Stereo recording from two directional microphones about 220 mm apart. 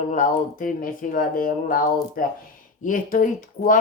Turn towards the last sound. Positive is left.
turn(degrees=35)  # may be behind; listen again after turning